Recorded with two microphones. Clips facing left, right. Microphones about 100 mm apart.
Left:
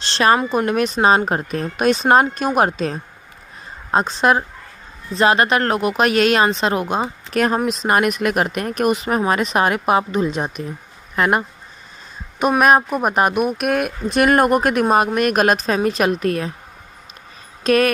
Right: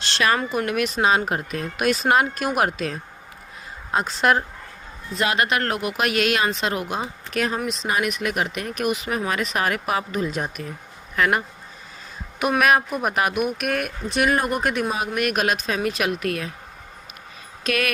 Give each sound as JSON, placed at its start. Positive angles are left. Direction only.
{"t": 0.5, "sound": "speech", "side_deg": 35}
{"t": 4.0, "sound": "speech", "side_deg": 20}
{"t": 5.1, "sound": "speech", "side_deg": 35}
{"t": 7.3, "sound": "speech", "side_deg": 45}
{"t": 14.2, "sound": "speech", "side_deg": 65}
{"t": 15.2, "sound": "speech", "side_deg": 40}
{"t": 17.6, "sound": "speech", "side_deg": 35}